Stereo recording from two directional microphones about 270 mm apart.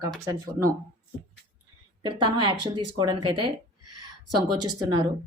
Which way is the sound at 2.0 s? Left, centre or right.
Centre.